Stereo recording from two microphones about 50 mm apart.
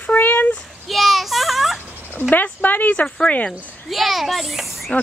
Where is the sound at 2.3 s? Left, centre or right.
Left.